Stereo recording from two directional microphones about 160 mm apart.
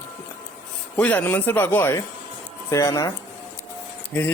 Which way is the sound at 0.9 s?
10° left (ahead or behind).